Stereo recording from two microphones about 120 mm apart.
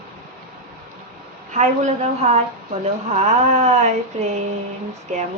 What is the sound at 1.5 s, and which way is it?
A woman's voice, 80° right.